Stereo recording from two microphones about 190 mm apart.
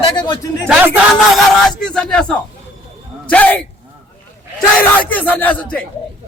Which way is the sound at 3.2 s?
10° left (ahead or behind).